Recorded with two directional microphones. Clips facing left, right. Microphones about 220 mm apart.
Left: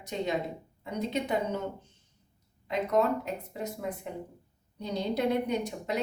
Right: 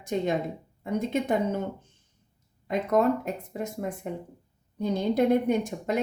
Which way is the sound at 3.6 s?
50° right (ahead or behind).